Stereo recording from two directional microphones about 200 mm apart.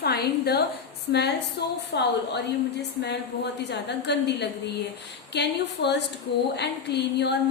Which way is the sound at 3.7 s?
60° left (ahead or behind).